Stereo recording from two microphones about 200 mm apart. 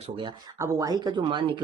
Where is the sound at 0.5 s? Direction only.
15° right (ahead or behind).